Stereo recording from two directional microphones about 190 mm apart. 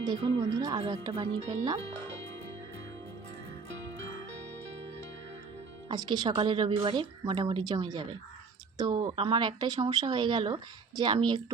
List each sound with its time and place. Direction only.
0.3 s speech: 25° right (ahead or behind)
5.9 s speech: 20° right (ahead or behind)